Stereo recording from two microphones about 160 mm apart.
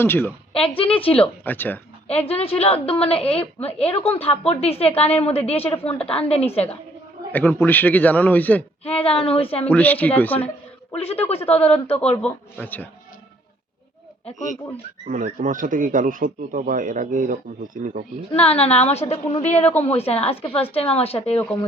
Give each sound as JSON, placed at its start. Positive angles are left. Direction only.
{"t": 0.0, "sound": "a man's voice", "side_deg": 10}
{"t": 0.8, "sound": "a woman's voice", "side_deg": 35}
{"t": 1.2, "sound": "a man's voice", "side_deg": 10}
{"t": 2.0, "sound": "a woman's voice", "side_deg": 40}
{"t": 7.3, "sound": "a man's voice", "side_deg": 10}
{"t": 8.8, "sound": "a woman's voice", "side_deg": 40}
{"t": 9.6, "sound": "a man's voice", "side_deg": 10}
{"t": 11.0, "sound": "a woman's voice", "side_deg": 40}
{"t": 11.9, "sound": "a man's voice", "side_deg": 10}
{"t": 15.0, "sound": "speech", "side_deg": -55}
{"t": 18.3, "sound": "a woman's voice", "side_deg": 40}
{"t": 20.3, "sound": "a man's voice", "side_deg": 15}
{"t": 20.6, "sound": "a woman's voice", "side_deg": 35}